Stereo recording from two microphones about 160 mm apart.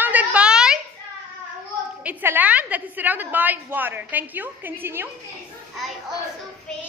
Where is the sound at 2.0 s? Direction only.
10° right (ahead or behind).